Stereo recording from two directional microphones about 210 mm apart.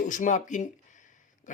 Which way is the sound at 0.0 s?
35° left (ahead or behind).